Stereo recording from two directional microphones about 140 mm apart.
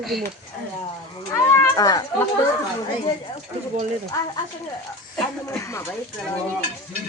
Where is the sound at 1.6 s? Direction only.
25° left (ahead or behind).